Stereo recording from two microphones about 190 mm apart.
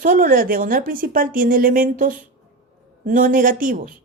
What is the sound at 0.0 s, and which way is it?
Speech, 45° right (ahead or behind).